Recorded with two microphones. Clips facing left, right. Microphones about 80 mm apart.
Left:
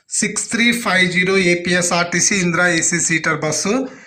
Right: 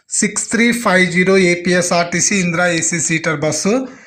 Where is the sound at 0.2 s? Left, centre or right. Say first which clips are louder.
Right 4 dB; right.